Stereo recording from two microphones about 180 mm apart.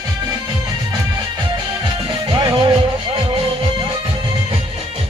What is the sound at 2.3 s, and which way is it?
Music, 25° right (ahead or behind).